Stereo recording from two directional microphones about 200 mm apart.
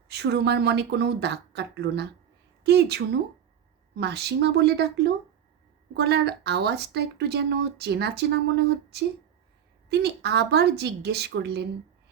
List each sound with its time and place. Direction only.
0.1 s speech: 55° right (ahead or behind)